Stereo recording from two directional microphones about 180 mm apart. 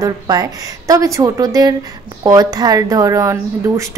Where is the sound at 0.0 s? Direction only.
20° right (ahead or behind).